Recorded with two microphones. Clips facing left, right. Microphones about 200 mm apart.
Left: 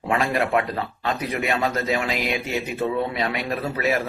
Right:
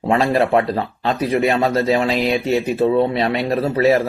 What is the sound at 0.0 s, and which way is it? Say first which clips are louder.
Speech: right 6 dB; 30° right (ahead or behind).